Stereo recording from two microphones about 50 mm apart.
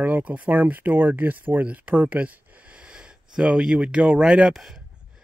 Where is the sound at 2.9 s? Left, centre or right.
Centre.